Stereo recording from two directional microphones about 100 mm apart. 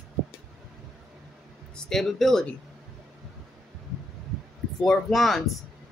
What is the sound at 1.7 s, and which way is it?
Speech, 5° left (ahead or behind).